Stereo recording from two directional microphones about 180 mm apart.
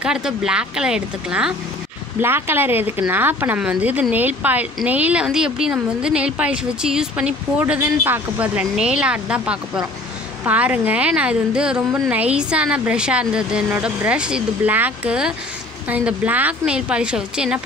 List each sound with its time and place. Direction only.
0.0 s a woman's voice: 5° right (ahead or behind)